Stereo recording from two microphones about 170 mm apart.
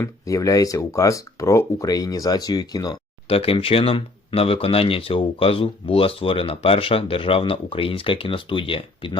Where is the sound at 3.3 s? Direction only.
35° left (ahead or behind).